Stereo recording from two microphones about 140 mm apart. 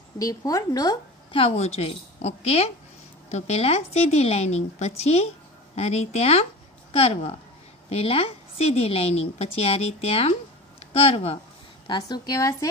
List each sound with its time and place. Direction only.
0.2 s a woman's voice: 25° left (ahead or behind)
1.4 s a woman's voice: 45° left (ahead or behind)
11.9 s a woman's voice: 25° left (ahead or behind)